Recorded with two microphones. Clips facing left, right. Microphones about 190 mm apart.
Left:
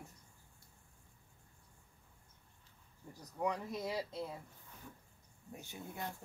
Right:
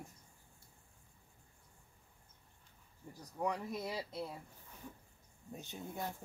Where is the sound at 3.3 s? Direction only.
10° right (ahead or behind).